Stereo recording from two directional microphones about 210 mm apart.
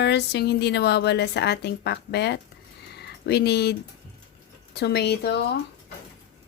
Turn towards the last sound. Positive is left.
turn(degrees=50)  # may be behind; listen again after turning